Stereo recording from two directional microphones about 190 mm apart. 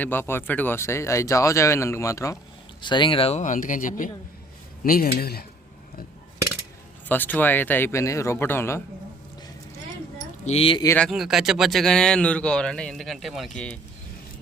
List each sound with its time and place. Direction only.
0.0 s speech: 10° left (ahead or behind); by 5.5 s 55° left (ahead or behind)
7.1 s speech: 10° left (ahead or behind)
10.4 s speech: 30° left (ahead or behind)
10.8 s speech: 5° left (ahead or behind)